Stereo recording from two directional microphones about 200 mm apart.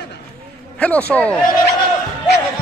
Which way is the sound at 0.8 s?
5° left (ahead or behind).